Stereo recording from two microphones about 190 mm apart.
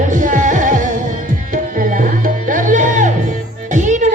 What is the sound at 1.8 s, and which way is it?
Music, 45° right (ahead or behind).